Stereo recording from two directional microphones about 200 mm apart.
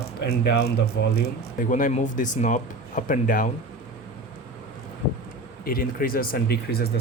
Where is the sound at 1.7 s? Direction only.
40° left (ahead or behind).